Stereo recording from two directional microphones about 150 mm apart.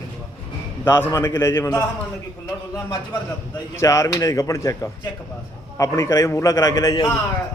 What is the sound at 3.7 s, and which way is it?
A man's voice, 20° left (ahead or behind).